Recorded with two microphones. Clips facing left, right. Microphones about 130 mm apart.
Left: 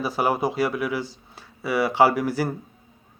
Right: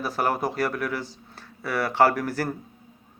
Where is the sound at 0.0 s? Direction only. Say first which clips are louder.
Left 2 dB; 5° left (ahead or behind).